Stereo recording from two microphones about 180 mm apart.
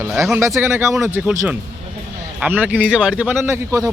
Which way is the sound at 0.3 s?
15° right (ahead or behind).